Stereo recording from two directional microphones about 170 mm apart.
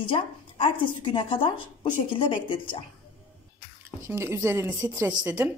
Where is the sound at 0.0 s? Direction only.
30° left (ahead or behind).